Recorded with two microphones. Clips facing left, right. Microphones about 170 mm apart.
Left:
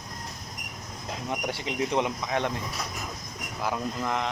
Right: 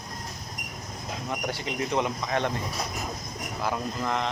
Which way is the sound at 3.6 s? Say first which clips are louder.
Even; 10° left (ahead or behind).